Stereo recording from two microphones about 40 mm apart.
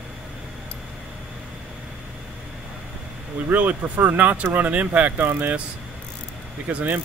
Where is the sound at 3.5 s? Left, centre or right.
Right.